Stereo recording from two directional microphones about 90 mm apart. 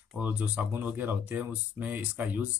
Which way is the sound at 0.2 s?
20° right (ahead or behind).